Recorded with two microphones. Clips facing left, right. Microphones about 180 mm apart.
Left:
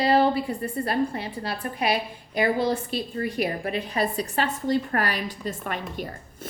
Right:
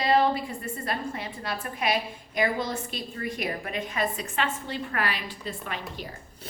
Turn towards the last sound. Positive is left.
turn(degrees=45)  # may be behind; listen again after turning